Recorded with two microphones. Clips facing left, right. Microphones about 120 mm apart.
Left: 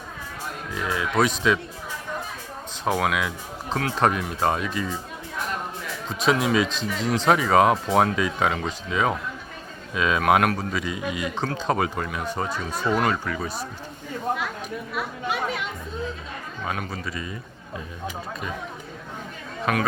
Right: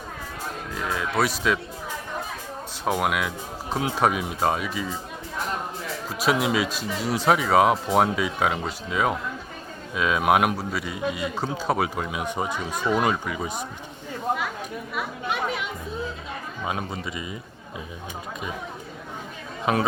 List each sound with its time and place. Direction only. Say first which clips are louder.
0.7 s speech: left 2 dB; centre (ahead or behind)
2.8 s speech: left 1 dB; 5° right (ahead or behind)
6.1 s speech: left 1 dB; 5° right (ahead or behind)
14.9 s speech: even; centre (ahead or behind)
16.6 s speech: right 1 dB; 20° right (ahead or behind)
19.7 s speech: right 1 dB; 20° right (ahead or behind)